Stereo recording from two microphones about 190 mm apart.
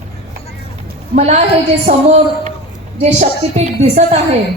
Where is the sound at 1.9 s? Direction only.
40° right (ahead or behind).